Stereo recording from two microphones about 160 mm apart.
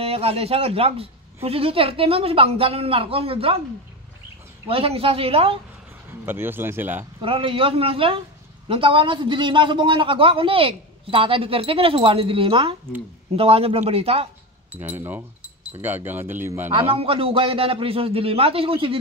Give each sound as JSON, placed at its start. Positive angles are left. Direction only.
{"t": 0.0, "sound": "a man's voice", "side_deg": -40}
{"t": 4.6, "sound": "a man's voice", "side_deg": -35}
{"t": 6.2, "sound": "speech", "side_deg": -15}
{"t": 7.2, "sound": "a man's voice", "side_deg": -35}
{"t": 14.7, "sound": "speech", "side_deg": -10}
{"t": 16.9, "sound": "a man's voice", "side_deg": -35}